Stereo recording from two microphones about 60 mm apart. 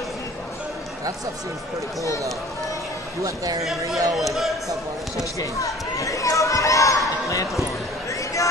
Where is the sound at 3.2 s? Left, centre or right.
Right.